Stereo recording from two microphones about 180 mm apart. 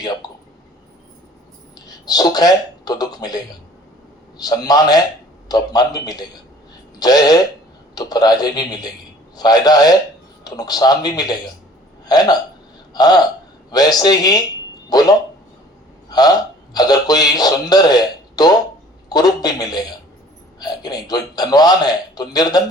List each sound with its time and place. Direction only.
0.0 s a man's voice: 20° left (ahead or behind)
2.0 s a man's voice: 20° left (ahead or behind)
16.0 s a sound: 20° left (ahead or behind)
16.7 s a man's voice: 20° left (ahead or behind)